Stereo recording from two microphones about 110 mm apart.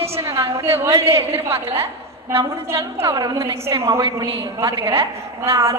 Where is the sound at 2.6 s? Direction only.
25° right (ahead or behind).